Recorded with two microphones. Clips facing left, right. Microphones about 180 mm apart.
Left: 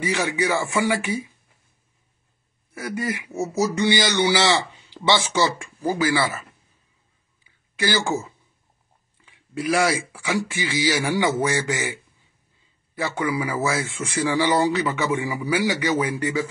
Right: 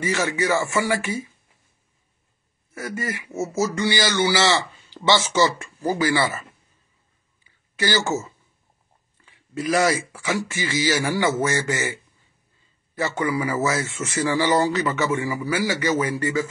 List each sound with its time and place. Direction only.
0.0 s speech: 15° left (ahead or behind)
2.9 s speech: 15° left (ahead or behind)
7.7 s speech: 10° left (ahead or behind)